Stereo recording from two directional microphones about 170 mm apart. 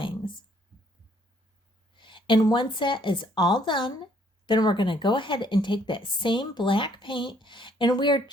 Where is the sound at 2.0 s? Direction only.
30° left (ahead or behind).